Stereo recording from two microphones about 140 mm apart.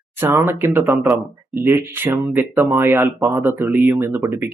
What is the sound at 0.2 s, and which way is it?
Speech, 15° right (ahead or behind).